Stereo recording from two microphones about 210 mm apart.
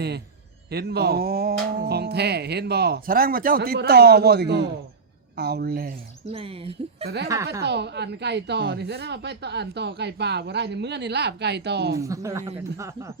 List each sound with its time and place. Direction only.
0.7 s a woman's voice: 50° right (ahead or behind)
6.3 s speech: 25° right (ahead or behind)
7.3 s speech: 15° right (ahead or behind)
7.6 s a woman's voice: 55° right (ahead or behind)
11.9 s speech: 15° right (ahead or behind)